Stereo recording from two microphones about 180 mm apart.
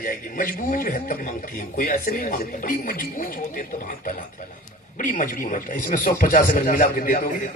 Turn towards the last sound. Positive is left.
turn(degrees=50)  # may be behind; listen again after turning